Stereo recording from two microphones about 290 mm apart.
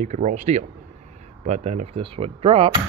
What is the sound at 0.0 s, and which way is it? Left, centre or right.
Speech, right.